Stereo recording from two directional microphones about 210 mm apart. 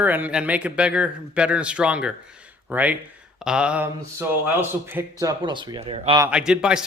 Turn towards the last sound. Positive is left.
turn(degrees=-5)  # may be behind; listen again after turning